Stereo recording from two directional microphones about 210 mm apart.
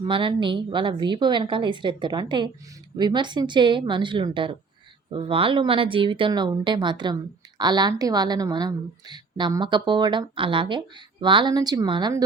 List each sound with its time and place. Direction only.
0.0 s a woman's voice: 25° right (ahead or behind)